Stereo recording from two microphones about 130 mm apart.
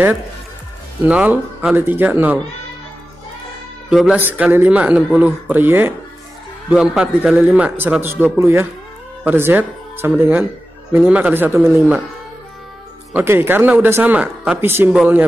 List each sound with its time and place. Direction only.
1.0 s speech: 10° right (ahead or behind)
3.9 s speech: 5° right (ahead or behind)
4.2 s speech: 15° right (ahead or behind)
6.7 s speech: 5° right (ahead or behind); by 12.0 s 20° right (ahead or behind)
13.1 s speech: 15° right (ahead or behind)